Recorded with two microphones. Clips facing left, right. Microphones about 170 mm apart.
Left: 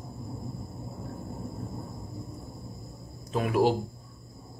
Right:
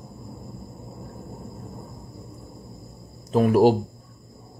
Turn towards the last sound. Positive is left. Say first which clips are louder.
# right 8 dB
turn(degrees=-40)  # may be behind; listen again after turning